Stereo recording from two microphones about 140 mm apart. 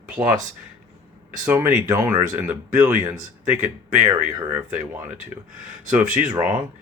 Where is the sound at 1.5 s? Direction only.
15° right (ahead or behind).